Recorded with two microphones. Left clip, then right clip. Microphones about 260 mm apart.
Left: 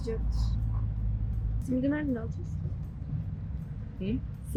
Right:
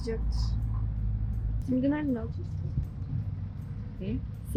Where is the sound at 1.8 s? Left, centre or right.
Centre.